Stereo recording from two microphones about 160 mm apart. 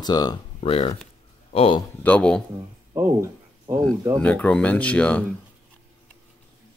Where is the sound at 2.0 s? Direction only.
10° left (ahead or behind).